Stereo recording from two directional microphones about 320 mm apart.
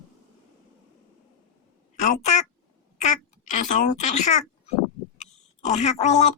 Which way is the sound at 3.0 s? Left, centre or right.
Left.